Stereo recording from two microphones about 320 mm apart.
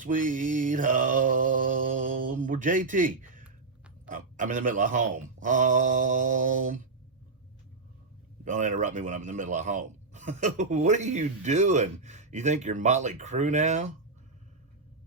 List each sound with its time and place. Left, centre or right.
0.0 s mantra: right
3.4 s a sound: centre
4.1 s speech: right
8.4 s speech: right